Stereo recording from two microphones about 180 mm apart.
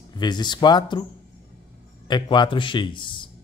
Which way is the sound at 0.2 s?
25° left (ahead or behind).